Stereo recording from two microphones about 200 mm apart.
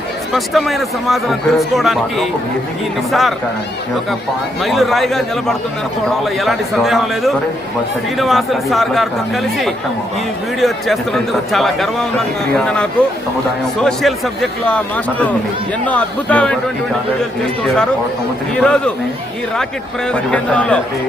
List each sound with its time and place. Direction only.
0.3 s speech: centre (ahead or behind)
4.6 s speech: centre (ahead or behind)
20.3 s speech: 5° left (ahead or behind)